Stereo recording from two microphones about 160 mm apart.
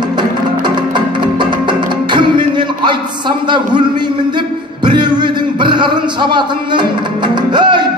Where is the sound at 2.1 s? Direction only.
30° right (ahead or behind).